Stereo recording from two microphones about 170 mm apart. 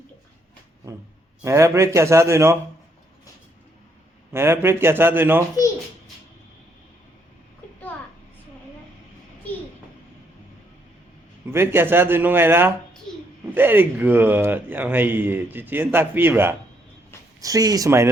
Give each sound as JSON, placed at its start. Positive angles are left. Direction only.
{"t": 1.5, "sound": "speech", "side_deg": -15}
{"t": 4.3, "sound": "speech", "side_deg": -15}
{"t": 11.5, "sound": "speech", "side_deg": -15}